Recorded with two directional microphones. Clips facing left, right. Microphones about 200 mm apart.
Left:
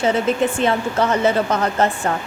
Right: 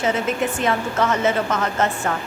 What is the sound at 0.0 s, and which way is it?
Speech, 30° left (ahead or behind).